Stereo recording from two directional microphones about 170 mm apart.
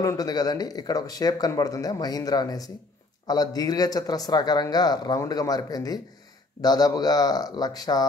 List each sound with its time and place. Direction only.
0.0 s speech: 20° left (ahead or behind)